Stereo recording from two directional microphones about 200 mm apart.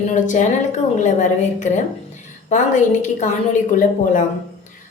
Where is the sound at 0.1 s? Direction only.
40° left (ahead or behind).